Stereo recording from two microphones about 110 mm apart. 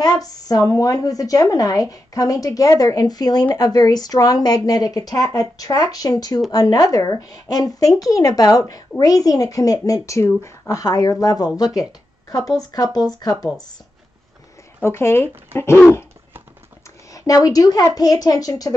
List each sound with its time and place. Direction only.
0.2 s a woman's voice: 35° left (ahead or behind)
14.8 s speech: 25° left (ahead or behind)
17.1 s a woman's voice: 35° left (ahead or behind)